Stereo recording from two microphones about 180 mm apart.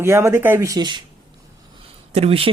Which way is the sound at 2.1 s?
35° right (ahead or behind).